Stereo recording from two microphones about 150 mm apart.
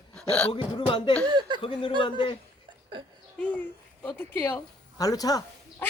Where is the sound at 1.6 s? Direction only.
35° left (ahead or behind).